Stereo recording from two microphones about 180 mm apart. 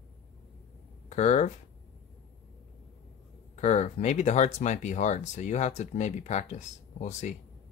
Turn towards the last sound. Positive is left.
turn(degrees=40)  # may be behind; listen again after turning